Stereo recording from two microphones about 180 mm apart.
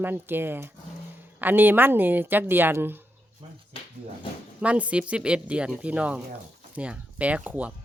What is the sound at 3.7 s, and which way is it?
Dog, 30° left (ahead or behind).